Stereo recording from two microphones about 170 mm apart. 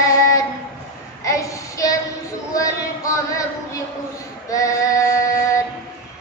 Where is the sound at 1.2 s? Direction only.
20° left (ahead or behind).